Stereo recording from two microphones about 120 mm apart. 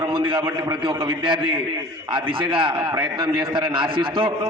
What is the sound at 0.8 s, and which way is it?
Speech, 40° right (ahead or behind).